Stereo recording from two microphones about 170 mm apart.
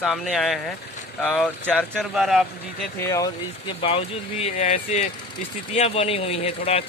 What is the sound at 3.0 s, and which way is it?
Speech, 20° left (ahead or behind).